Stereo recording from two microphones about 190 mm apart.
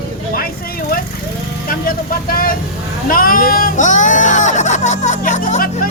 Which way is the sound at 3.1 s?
50° left (ahead or behind).